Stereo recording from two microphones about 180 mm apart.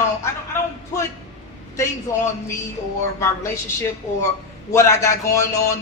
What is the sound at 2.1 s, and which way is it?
Speech, 15° left (ahead or behind).